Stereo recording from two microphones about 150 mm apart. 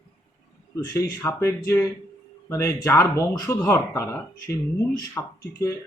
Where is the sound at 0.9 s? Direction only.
25° left (ahead or behind).